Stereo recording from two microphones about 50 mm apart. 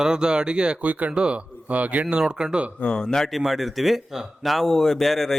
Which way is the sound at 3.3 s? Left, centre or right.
Centre.